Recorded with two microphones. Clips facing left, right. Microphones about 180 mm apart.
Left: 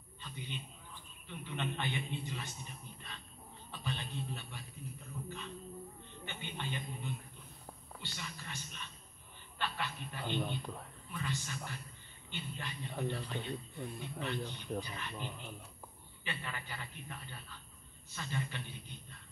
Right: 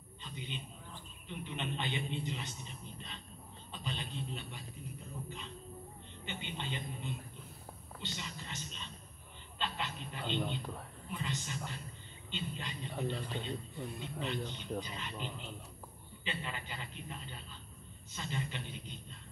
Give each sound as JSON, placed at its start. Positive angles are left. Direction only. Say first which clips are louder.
{"t": 0.2, "sound": "dog", "louder": "right 1 dB", "side_deg": -20}
{"t": 1.4, "sound": "a man's voice", "louder": "left 1 dB", "side_deg": -20}
{"t": 3.7, "sound": "a sound", "louder": "even", "side_deg": -20}
{"t": 6.2, "sound": "a man's voice", "louder": "right 1 dB", "side_deg": -20}